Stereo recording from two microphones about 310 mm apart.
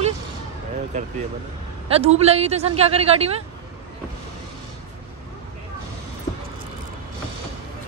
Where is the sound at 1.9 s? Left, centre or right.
Centre.